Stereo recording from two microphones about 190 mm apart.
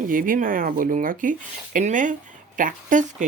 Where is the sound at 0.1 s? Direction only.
45° right (ahead or behind).